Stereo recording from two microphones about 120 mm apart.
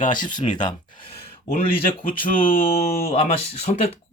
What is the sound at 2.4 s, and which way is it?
Speech, 50° left (ahead or behind).